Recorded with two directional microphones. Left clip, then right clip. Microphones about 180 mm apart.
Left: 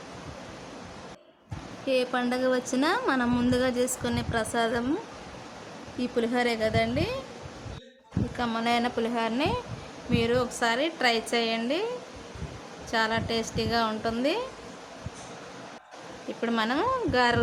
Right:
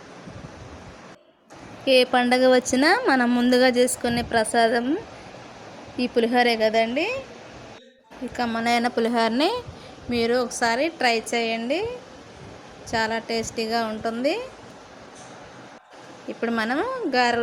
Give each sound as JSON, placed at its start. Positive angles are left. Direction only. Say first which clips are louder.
{"t": 1.8, "sound": "a woman's voice", "louder": "right 8 dB", "side_deg": -20}
{"t": 6.0, "sound": "a woman's voice", "louder": "right 7 dB", "side_deg": -15}
{"t": 8.4, "sound": "a woman's voice", "louder": "right 4 dB", "side_deg": -20}
{"t": 12.9, "sound": "a woman's voice", "louder": "right 2 dB", "side_deg": -10}
{"t": 16.4, "sound": "a woman's voice", "louder": "right 2 dB", "side_deg": -15}